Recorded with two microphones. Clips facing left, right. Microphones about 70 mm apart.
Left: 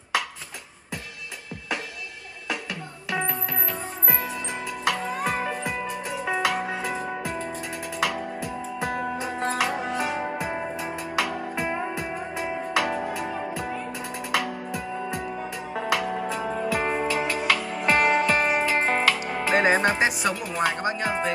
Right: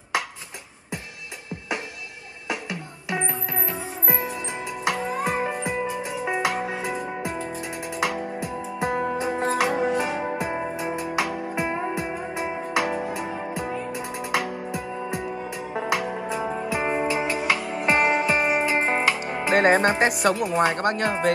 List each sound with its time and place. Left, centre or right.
2.4 s music: centre
20.2 s speech: right
20.8 s speech: right